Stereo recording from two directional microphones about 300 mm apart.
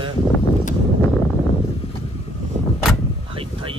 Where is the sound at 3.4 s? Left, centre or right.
Centre.